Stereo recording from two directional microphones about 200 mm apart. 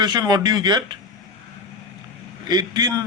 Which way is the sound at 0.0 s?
20° right (ahead or behind).